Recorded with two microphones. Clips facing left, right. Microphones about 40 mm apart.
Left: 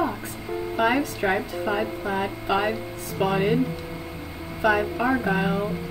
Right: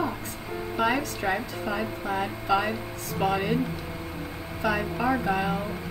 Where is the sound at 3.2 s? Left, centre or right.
Centre.